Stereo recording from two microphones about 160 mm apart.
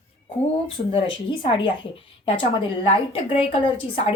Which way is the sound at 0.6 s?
30° left (ahead or behind).